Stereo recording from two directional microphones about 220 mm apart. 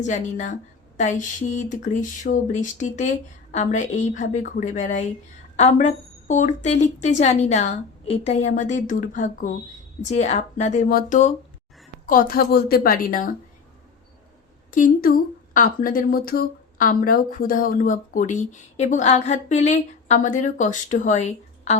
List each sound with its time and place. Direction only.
0.0 s a woman's voice: 35° left (ahead or behind)
14.7 s a woman's voice: 40° left (ahead or behind)